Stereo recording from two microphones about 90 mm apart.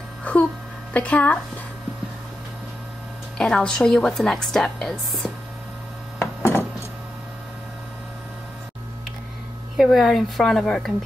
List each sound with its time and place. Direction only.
0.2 s music: 15° left (ahead or behind)
0.9 s a woman's voice: 15° left (ahead or behind)
3.3 s a woman's voice: 5° left (ahead or behind)
6.1 s wood: 25° left (ahead or behind)
9.8 s a woman's voice: centre (ahead or behind)